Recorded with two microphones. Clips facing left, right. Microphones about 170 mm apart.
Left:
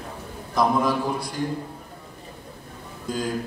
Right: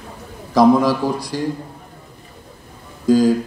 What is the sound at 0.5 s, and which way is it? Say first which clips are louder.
Speech: right 8 dB; 90° right.